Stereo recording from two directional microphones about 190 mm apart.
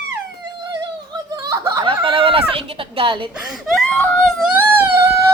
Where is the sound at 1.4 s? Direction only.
15° right (ahead or behind).